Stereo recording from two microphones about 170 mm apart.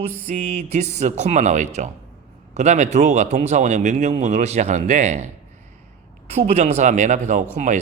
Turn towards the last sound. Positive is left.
turn(degrees=-45)  # may be behind; listen again after turning